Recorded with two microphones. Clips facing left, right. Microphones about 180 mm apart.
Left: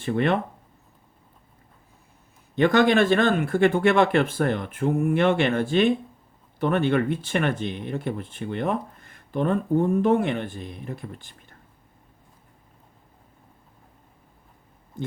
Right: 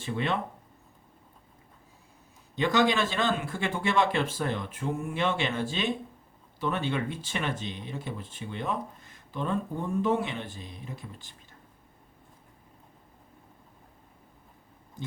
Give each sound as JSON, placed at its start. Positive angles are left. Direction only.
{"t": 0.0, "sound": "speech", "side_deg": 55}
{"t": 2.6, "sound": "speech", "side_deg": 60}